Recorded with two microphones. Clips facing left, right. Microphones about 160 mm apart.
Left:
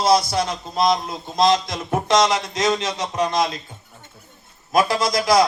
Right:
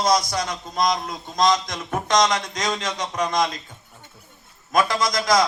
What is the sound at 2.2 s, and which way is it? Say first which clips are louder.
Speech: right 1 dB; 5° left (ahead or behind).